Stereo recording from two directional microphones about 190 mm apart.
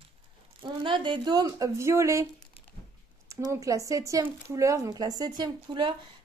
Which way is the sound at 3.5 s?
15° right (ahead or behind).